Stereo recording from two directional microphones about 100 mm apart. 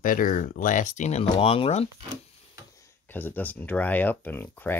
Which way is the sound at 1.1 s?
80° left.